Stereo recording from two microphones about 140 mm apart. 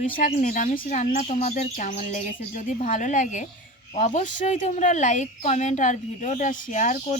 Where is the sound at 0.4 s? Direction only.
65° left (ahead or behind).